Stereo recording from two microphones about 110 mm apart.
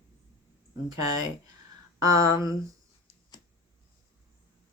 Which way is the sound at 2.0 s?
30° right (ahead or behind).